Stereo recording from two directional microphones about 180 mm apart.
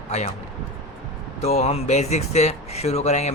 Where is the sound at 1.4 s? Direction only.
35° left (ahead or behind).